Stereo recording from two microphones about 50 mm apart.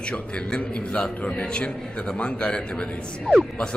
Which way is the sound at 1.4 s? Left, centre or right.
Centre.